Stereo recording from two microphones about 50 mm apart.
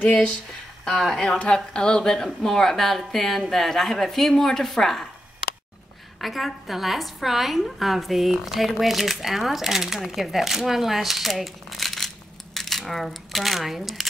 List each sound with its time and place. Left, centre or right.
0.1 s speech: centre
0.8 s a woman's voice: centre
6.2 s a woman's voice: centre